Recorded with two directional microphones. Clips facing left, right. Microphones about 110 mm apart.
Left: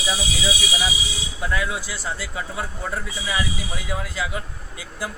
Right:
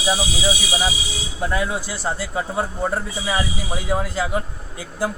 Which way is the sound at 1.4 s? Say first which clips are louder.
Right 3 dB; 35° right (ahead or behind).